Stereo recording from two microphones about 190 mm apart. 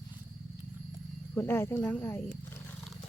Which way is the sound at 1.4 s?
10° left (ahead or behind).